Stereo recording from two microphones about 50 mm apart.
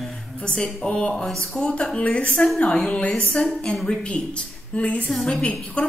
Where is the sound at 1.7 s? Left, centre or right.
Centre.